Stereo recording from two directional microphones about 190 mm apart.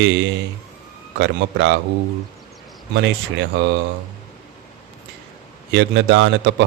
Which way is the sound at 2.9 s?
70° right (ahead or behind).